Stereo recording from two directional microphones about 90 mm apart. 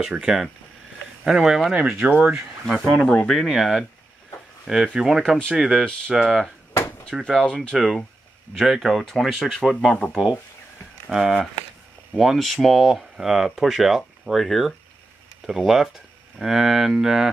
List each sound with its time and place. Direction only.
0.0 s speech: 10° right (ahead or behind)
3.0 s speech: 15° left (ahead or behind)
3.3 s speech: centre (ahead or behind)
7.4 s speech: 10° left (ahead or behind)
7.7 s speech: centre (ahead or behind)
10.0 s speech: 25° left (ahead or behind)
11.1 s speech: 5° right (ahead or behind)